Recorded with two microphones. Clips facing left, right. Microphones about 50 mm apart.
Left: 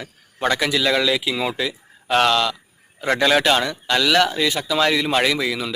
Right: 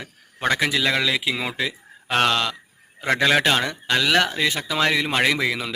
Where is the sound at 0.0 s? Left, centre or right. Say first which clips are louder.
Left 2 dB; right.